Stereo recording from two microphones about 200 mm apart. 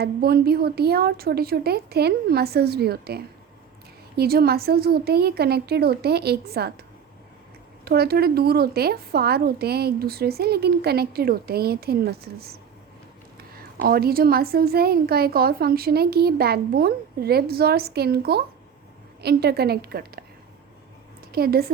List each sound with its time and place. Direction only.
0.0 s a woman's voice: 50° right (ahead or behind)
7.9 s a woman's voice: 50° right (ahead or behind)
13.5 s a woman's voice: 50° right (ahead or behind)
21.3 s a woman's voice: 50° right (ahead or behind)